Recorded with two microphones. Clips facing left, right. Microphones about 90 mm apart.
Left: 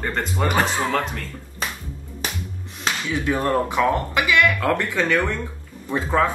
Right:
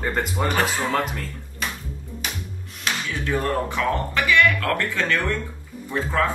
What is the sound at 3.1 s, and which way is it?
Speech, 10° left (ahead or behind).